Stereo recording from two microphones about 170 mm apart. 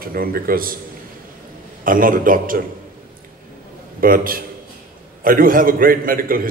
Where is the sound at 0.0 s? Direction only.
60° right (ahead or behind).